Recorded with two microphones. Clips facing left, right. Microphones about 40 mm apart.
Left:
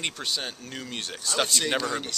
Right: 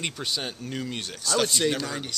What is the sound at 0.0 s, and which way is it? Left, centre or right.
Speech, centre.